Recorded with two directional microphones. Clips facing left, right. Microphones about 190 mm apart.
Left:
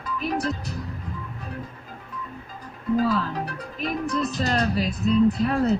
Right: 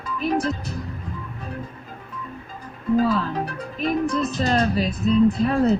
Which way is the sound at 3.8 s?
25° right (ahead or behind).